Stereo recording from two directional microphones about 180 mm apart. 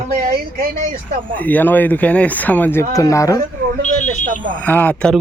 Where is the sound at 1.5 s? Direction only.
10° left (ahead or behind).